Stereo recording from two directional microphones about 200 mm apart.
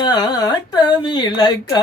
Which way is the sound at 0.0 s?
20° left (ahead or behind).